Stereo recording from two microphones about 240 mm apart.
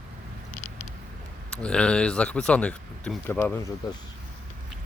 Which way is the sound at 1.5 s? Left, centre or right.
Centre.